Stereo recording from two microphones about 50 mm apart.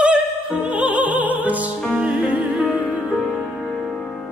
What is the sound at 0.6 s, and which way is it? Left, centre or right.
Opera, right.